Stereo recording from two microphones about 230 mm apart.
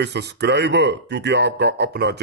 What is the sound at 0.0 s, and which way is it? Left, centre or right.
A man's voice, right.